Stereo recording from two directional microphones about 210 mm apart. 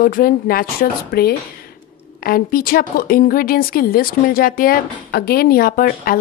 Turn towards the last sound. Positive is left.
turn(degrees=45)  # may be behind; listen again after turning